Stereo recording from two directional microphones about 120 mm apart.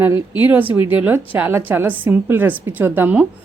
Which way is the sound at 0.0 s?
20° right (ahead or behind).